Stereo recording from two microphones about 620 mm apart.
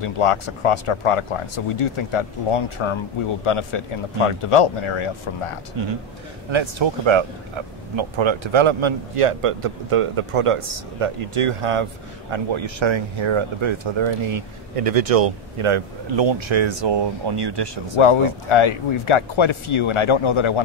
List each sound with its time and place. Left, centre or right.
0.0 s speech: left
5.8 s a man's voice: right
17.9 s speech: left